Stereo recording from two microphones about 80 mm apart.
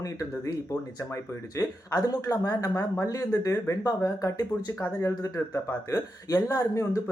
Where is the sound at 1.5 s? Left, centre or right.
Left.